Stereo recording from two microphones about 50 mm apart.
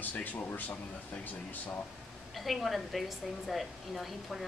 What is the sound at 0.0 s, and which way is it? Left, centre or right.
Speech, left.